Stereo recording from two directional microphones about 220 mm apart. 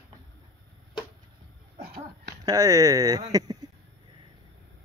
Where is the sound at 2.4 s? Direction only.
15° right (ahead or behind).